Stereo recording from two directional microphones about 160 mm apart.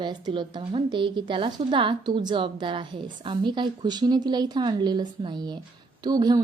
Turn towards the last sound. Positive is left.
turn(degrees=-25)  # may be behind; listen again after turning